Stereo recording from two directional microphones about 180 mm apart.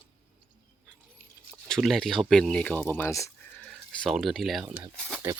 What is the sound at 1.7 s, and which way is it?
Speech, centre (ahead or behind).